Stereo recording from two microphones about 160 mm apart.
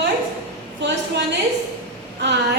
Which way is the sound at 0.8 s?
90° right.